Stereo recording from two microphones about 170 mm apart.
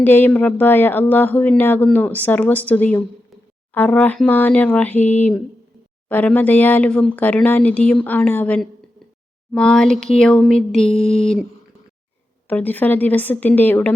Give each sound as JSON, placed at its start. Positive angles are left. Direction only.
{"t": 0.0, "sound": "speech", "side_deg": 10}
{"t": 10.9, "sound": "speech", "side_deg": 35}
{"t": 12.5, "sound": "speech", "side_deg": 10}